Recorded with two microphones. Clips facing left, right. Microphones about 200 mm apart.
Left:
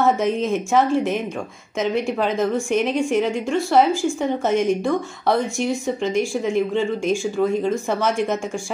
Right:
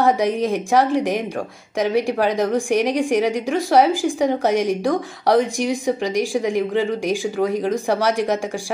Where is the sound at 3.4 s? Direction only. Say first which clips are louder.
Right 1 dB; 90° right.